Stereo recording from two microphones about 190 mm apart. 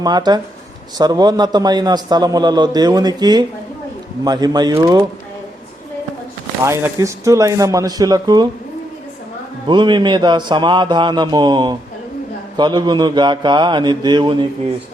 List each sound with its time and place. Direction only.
0.0 s a man's voice: 20° right (ahead or behind)
6.6 s speech: 15° right (ahead or behind)
9.6 s a man's voice: 25° right (ahead or behind)